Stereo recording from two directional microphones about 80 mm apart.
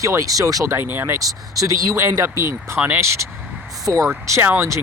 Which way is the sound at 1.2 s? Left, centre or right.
Right.